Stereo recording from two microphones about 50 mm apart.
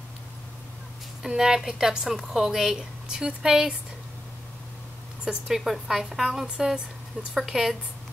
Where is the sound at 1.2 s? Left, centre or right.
Centre.